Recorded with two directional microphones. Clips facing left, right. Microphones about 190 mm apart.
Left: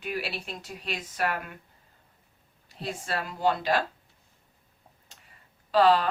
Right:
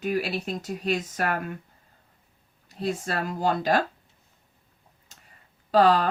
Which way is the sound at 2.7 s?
45° right (ahead or behind).